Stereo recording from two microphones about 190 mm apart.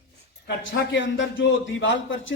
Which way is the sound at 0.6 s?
75° left (ahead or behind).